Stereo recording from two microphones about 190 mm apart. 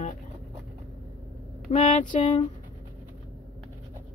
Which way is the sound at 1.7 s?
35° left (ahead or behind).